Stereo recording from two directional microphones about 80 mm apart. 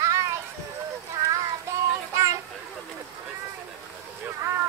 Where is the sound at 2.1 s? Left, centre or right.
Right.